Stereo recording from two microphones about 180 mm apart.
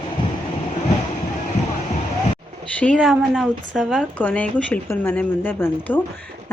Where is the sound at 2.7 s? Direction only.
5° left (ahead or behind).